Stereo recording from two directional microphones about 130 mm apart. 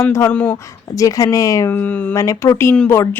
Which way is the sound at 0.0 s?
20° left (ahead or behind).